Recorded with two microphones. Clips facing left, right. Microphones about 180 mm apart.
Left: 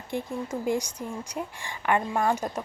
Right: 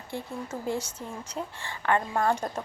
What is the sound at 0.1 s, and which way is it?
A woman's voice, 15° left (ahead or behind).